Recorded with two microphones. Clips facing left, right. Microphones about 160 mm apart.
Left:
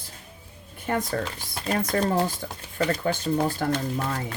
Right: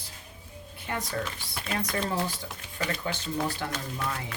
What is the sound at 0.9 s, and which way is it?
Speech, 50° left (ahead or behind).